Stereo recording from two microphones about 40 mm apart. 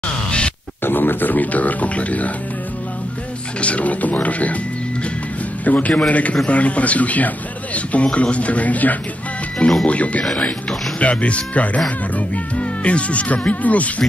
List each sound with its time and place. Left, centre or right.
0.8 s a man's voice: left
3.6 s a man's voice: left
5.7 s a man's voice: left